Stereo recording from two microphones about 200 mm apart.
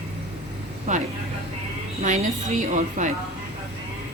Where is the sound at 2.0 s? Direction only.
35° right (ahead or behind).